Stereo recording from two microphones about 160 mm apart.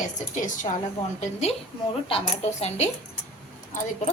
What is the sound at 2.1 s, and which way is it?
Speech, 40° left (ahead or behind).